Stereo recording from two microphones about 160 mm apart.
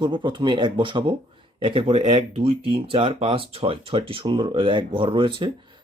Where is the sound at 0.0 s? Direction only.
30° right (ahead or behind).